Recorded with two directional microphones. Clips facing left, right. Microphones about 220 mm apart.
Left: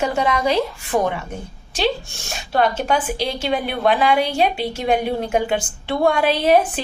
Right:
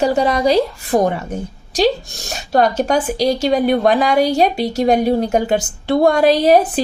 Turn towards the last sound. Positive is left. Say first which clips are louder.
# right 4 dB
turn(degrees=-40)  # may be behind; listen again after turning